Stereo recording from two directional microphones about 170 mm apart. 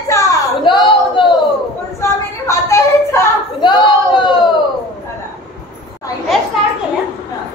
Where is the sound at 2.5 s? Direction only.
15° left (ahead or behind).